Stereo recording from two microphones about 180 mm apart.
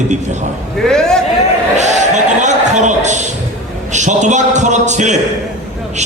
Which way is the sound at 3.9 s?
40° right (ahead or behind).